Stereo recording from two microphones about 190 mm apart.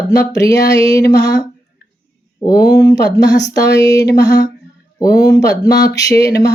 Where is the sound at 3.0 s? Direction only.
65° left (ahead or behind).